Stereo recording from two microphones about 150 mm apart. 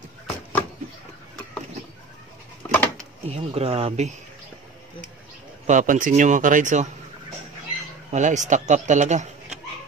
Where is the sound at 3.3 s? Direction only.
40° right (ahead or behind).